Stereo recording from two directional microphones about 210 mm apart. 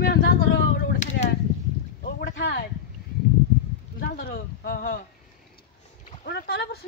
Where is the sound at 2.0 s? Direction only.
50° left (ahead or behind).